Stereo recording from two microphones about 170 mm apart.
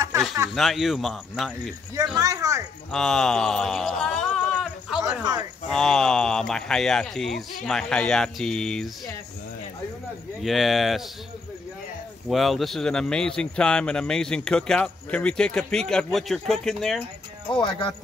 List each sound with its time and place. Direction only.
0.6 s speech: centre (ahead or behind)
2.1 s a sound: 20° right (ahead or behind)
2.9 s a sound: 5° left (ahead or behind)
5.7 s speech: 5° left (ahead or behind)
10.4 s speech: centre (ahead or behind)
12.3 s speech: centre (ahead or behind)
17.5 s speech: 30° left (ahead or behind)